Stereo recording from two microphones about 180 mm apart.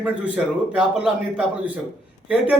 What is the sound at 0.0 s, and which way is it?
A man's voice, 5° right (ahead or behind).